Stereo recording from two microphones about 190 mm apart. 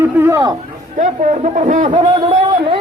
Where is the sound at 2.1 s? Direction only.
25° right (ahead or behind).